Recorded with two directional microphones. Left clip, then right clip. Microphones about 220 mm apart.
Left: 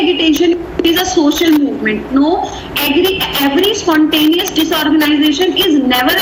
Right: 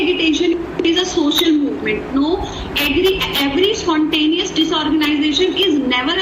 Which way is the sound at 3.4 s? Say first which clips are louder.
Left 5 dB; 35° left (ahead or behind).